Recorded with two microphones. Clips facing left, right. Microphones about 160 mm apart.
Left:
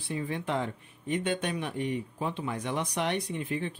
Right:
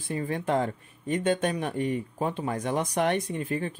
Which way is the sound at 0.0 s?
45° right (ahead or behind).